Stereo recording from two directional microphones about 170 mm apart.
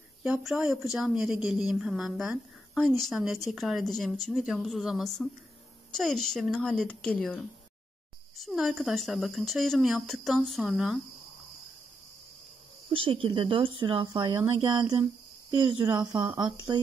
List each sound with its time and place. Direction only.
0.2 s speech: 5° right (ahead or behind)
12.9 s speech: 30° right (ahead or behind)